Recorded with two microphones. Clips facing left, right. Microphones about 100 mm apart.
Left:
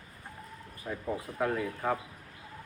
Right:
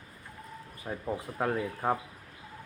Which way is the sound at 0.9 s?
25° right (ahead or behind).